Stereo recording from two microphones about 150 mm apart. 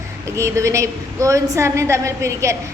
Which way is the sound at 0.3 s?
20° right (ahead or behind).